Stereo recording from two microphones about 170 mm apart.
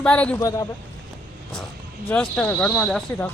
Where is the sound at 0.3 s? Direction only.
20° left (ahead or behind).